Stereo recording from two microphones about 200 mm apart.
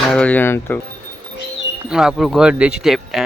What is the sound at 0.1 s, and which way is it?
Speech, 5° left (ahead or behind).